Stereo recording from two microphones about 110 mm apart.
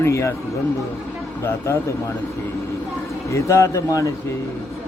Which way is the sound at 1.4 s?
25° left (ahead or behind).